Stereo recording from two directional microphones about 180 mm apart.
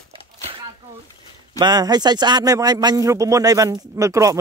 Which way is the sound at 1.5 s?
20° right (ahead or behind).